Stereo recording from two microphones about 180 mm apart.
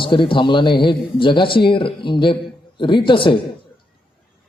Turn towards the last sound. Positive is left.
turn(degrees=30)  # may be behind; listen again after turning